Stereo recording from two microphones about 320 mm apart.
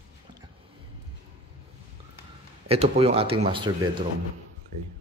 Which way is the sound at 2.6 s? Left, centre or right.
Centre.